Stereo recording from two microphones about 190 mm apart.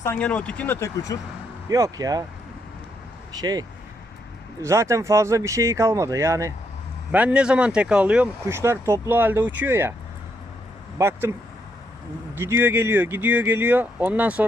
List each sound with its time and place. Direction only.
0.0 s speech: 10° left (ahead or behind)
1.7 s speech: 20° right (ahead or behind)
3.3 s speech: 20° right (ahead or behind)
10.9 s speech: 15° right (ahead or behind)
12.4 s speech: 10° right (ahead or behind)